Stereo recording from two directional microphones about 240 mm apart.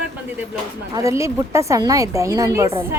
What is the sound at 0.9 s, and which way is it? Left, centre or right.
A woman's voice, centre.